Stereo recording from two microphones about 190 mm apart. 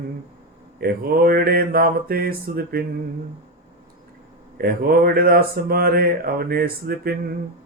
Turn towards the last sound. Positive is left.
turn(degrees=-55)  # may be behind; listen again after turning